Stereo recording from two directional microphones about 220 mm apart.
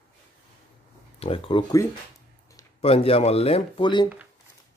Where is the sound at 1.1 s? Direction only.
25° left (ahead or behind).